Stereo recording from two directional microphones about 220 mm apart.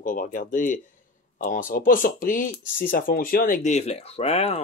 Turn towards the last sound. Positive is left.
turn(degrees=30)  # may be behind; listen again after turning